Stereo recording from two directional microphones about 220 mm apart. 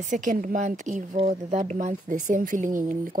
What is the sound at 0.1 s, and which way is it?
Speech, 35° right (ahead or behind).